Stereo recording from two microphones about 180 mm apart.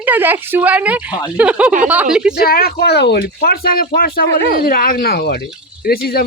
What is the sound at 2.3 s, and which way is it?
Speech, 60° left (ahead or behind).